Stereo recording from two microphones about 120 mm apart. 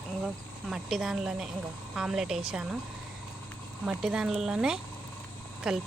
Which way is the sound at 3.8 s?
5° right (ahead or behind).